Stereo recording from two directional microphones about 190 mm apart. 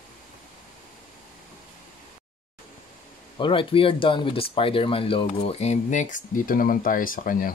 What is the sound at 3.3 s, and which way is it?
Speech, 25° left (ahead or behind).